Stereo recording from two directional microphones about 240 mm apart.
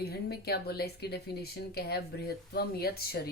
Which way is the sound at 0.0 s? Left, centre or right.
Left.